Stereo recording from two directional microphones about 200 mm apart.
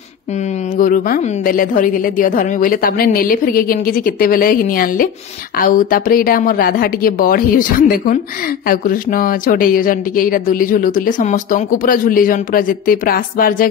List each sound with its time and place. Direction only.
0.7 s a woman's voice: 45° left (ahead or behind)
8.6 s a woman's voice: 45° left (ahead or behind)